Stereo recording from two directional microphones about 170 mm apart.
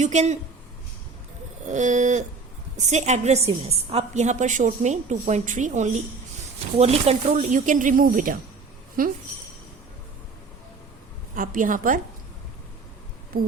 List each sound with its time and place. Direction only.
0.0 s a woman's voice: 45° right (ahead or behind)
1.6 s a woman's voice: 45° right (ahead or behind)
11.3 s a woman's voice: 50° right (ahead or behind)